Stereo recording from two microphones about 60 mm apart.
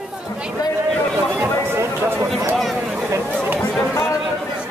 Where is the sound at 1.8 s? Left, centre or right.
Right.